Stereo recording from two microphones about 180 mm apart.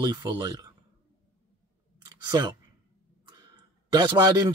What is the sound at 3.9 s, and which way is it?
Speech, 25° right (ahead or behind).